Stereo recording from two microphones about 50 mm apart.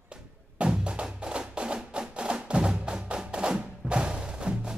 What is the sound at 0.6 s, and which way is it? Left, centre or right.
Music, right.